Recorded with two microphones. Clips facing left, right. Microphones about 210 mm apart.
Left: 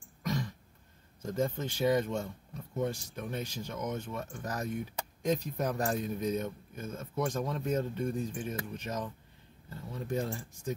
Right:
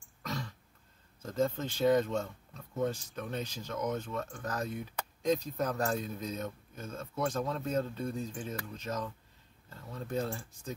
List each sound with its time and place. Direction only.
0.2 s throat clearing: 15° left (ahead or behind)
1.2 s speech: 15° left (ahead or behind)